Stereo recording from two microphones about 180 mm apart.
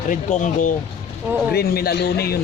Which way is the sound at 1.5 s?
60° left (ahead or behind).